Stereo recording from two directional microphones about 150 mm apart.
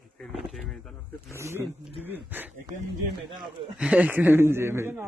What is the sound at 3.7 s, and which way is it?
Speech, 10° right (ahead or behind).